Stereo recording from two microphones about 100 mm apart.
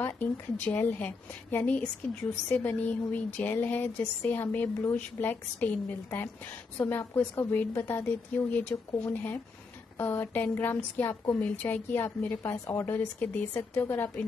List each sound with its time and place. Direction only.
0.7 s a woman's voice: 15° left (ahead or behind)